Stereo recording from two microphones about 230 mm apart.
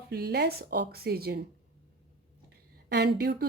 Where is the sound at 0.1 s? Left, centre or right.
Right.